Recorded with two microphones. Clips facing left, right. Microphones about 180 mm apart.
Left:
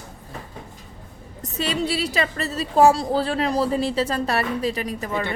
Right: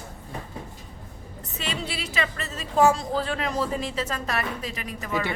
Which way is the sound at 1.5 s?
40° left (ahead or behind).